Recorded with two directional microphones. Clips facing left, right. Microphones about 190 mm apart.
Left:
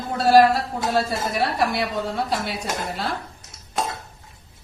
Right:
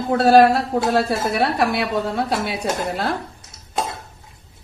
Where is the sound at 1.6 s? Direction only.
60° right (ahead or behind).